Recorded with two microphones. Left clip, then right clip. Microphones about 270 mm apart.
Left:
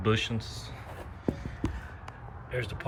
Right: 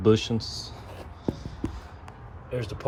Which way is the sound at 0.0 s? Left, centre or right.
Centre.